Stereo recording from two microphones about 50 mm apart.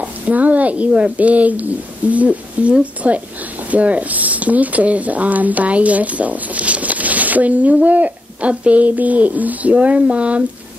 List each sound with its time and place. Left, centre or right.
0.0 s speech: right